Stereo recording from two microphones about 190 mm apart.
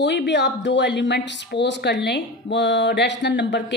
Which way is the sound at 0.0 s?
65° left (ahead or behind).